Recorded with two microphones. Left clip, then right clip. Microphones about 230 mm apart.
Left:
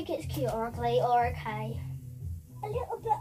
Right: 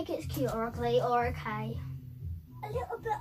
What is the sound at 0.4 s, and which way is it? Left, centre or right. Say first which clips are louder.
A woman's voice: left 1 dB; centre.